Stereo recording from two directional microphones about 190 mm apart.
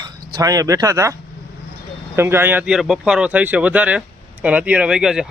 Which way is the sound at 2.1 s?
10° right (ahead or behind).